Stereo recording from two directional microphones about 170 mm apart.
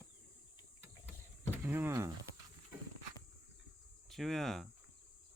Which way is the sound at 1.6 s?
15° right (ahead or behind).